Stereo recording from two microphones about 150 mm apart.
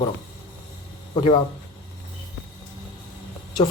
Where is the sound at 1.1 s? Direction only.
35° left (ahead or behind).